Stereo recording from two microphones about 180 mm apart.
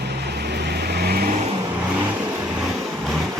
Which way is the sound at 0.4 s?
65° right (ahead or behind).